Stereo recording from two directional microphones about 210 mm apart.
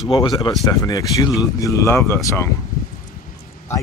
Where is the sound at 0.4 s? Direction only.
15° left (ahead or behind).